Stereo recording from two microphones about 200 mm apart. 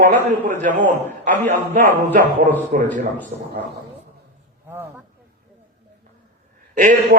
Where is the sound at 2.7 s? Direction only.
40° right (ahead or behind).